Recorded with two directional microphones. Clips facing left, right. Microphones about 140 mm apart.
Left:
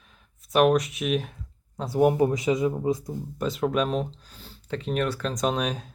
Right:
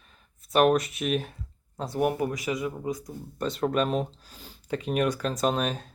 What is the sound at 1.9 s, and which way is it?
Speech, 20° left (ahead or behind).